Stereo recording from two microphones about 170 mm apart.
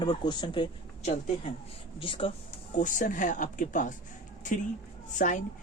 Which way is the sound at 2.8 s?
50° left (ahead or behind).